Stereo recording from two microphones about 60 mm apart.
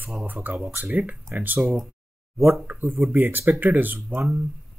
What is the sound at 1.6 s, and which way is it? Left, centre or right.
Speech, centre.